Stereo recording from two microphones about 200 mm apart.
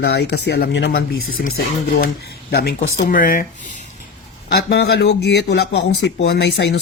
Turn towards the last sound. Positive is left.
turn(degrees=60)  # may be behind; listen again after turning